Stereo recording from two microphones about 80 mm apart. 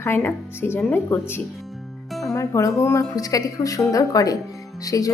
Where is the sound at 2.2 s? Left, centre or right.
Left.